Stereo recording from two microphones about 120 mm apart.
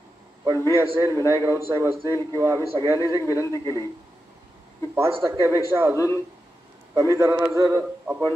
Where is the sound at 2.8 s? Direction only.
25° left (ahead or behind).